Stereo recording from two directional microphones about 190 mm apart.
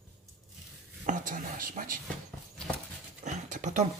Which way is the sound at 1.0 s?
40° right (ahead or behind).